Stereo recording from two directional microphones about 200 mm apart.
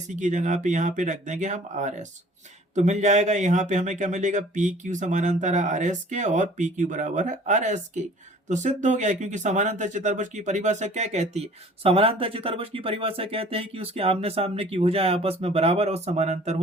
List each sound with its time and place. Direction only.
0.1 s speech: 35° right (ahead or behind)